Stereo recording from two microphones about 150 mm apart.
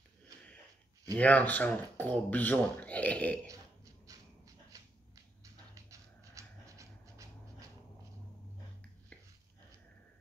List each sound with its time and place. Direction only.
1.1 s speech: 10° left (ahead or behind)
3.4 s burping: 20° right (ahead or behind)
4.7 s a sound: 25° right (ahead or behind)